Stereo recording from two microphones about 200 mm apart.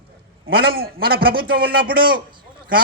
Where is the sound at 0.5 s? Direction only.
50° right (ahead or behind).